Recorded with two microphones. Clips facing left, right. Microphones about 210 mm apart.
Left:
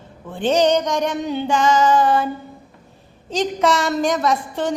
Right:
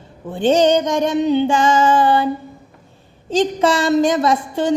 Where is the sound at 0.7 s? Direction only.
25° right (ahead or behind).